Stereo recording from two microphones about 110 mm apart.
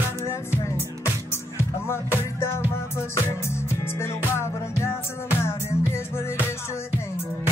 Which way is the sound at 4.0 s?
25° left (ahead or behind).